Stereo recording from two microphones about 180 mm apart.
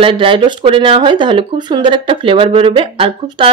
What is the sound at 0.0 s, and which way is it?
Speech, 30° right (ahead or behind).